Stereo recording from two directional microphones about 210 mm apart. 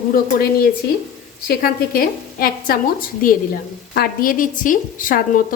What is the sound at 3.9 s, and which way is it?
A woman's voice, 45° left (ahead or behind).